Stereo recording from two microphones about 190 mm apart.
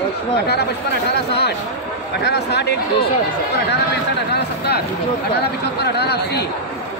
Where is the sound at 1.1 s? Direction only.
60° left (ahead or behind).